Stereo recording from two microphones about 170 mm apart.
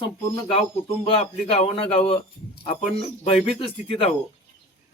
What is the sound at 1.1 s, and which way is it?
A man's voice, 35° left (ahead or behind).